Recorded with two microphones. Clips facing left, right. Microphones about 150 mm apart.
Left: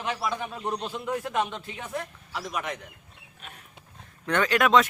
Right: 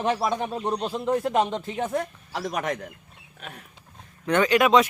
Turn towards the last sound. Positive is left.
turn(degrees=-5)  # may be behind; listen again after turning